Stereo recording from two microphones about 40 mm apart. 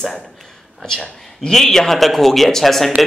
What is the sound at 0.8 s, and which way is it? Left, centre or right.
A man's voice, centre.